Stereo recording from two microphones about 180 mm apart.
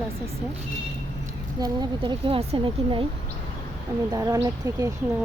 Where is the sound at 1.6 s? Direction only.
25° right (ahead or behind).